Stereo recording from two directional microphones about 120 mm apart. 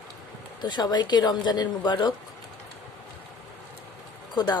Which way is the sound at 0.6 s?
35° left (ahead or behind).